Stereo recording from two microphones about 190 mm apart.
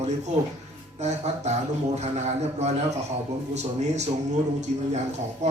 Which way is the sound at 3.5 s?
35° right (ahead or behind).